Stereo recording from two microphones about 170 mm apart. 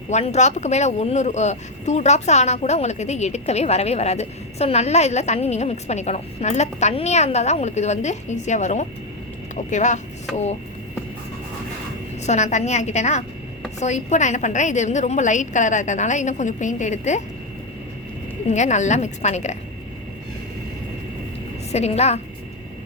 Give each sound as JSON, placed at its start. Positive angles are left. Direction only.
{"t": 0.1, "sound": "a woman's voice", "side_deg": 40}
{"t": 12.2, "sound": "a woman's voice", "side_deg": 40}
{"t": 18.5, "sound": "a woman's voice", "side_deg": 45}
{"t": 21.7, "sound": "speech", "side_deg": 40}